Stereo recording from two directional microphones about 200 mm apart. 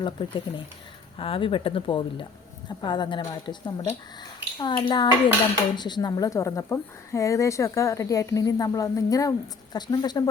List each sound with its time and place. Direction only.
0.0 s a woman's voice: 25° left (ahead or behind)